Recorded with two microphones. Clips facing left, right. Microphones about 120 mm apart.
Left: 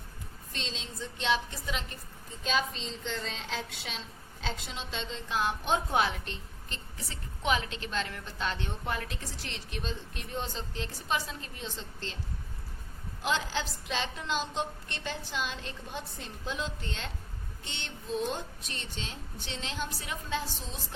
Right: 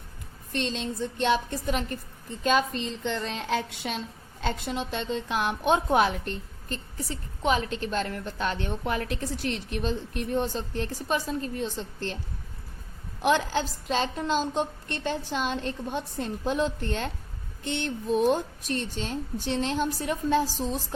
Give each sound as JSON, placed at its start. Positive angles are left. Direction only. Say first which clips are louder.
{"t": 0.5, "sound": "a woman's voice", "louder": "right 11 dB", "side_deg": -55}
{"t": 13.2, "sound": "a woman's voice", "louder": "right 7 dB", "side_deg": -55}